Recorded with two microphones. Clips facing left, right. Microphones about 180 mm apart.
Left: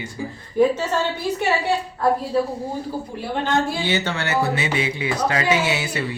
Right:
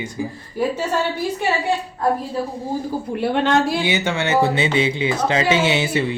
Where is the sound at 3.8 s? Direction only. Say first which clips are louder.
Right 3 dB; 15° right (ahead or behind).